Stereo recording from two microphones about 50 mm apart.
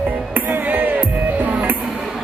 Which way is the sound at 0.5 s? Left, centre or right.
Right.